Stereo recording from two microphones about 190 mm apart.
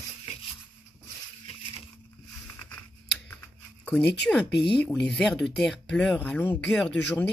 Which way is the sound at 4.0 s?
65° left (ahead or behind).